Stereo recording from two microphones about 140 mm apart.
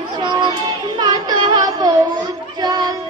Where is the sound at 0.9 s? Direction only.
35° right (ahead or behind).